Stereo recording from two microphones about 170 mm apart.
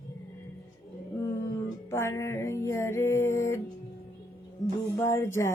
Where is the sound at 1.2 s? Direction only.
20° left (ahead or behind).